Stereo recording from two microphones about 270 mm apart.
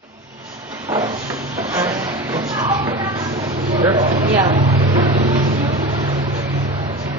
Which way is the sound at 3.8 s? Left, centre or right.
Centre.